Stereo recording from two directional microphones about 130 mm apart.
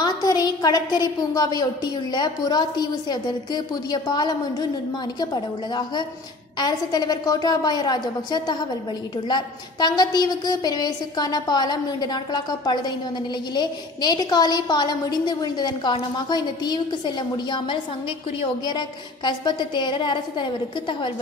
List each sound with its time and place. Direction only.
0.0 s a woman's voice: 30° left (ahead or behind)